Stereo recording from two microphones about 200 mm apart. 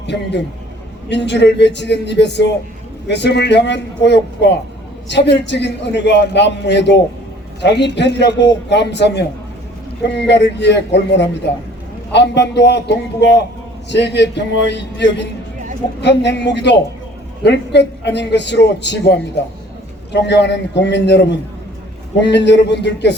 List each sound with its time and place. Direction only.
0.0 s a man's voice: 60° left (ahead or behind)